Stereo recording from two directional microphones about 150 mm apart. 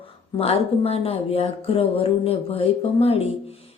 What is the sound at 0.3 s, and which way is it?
Speech, 40° left (ahead or behind).